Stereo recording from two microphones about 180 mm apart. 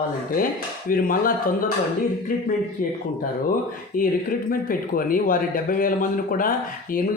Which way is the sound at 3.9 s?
50° left (ahead or behind).